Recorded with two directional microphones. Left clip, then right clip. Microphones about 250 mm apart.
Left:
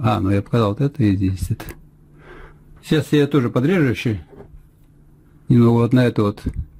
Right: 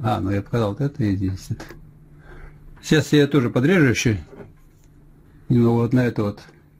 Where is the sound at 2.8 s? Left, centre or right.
Centre.